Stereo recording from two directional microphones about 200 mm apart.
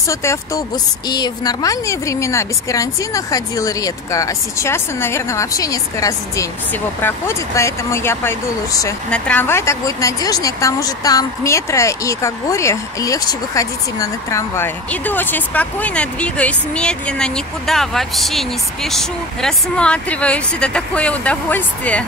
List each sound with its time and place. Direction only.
0.1 s a woman's voice: 15° left (ahead or behind)